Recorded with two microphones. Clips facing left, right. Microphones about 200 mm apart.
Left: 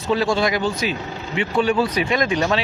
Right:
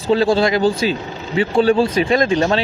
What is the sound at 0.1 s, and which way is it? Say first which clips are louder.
Speech: right 5 dB; 30° right (ahead or behind).